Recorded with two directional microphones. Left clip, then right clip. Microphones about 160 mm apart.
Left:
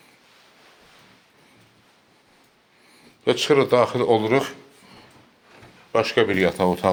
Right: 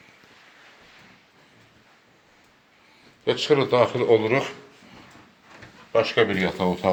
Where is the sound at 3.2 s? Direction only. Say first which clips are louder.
Left 3 dB; 60° left (ahead or behind); by 4.5 s 40° left (ahead or behind).